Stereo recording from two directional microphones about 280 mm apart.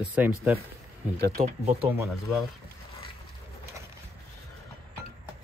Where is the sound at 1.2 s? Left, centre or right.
Right.